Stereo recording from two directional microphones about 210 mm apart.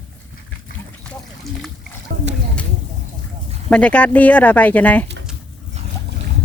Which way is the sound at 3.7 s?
5° left (ahead or behind).